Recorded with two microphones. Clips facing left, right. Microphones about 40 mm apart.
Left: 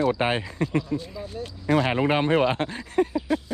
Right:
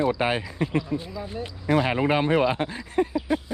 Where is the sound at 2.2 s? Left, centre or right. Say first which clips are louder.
Even; left.